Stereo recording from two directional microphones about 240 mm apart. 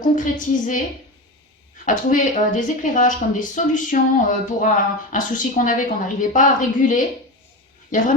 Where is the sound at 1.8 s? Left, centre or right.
Left.